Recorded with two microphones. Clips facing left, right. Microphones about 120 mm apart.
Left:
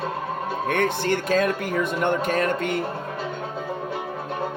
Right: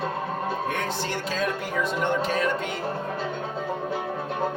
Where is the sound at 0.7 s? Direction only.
55° left (ahead or behind).